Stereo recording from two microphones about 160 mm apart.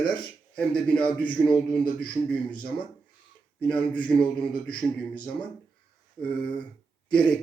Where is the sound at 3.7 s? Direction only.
5° left (ahead or behind).